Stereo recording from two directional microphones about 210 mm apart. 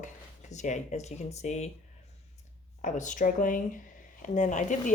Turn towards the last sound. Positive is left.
turn(degrees=35)  # may be behind; listen again after turning